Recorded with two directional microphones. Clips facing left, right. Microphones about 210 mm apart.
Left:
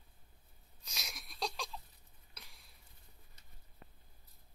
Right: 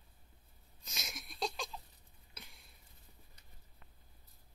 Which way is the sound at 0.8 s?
Centre (ahead or behind).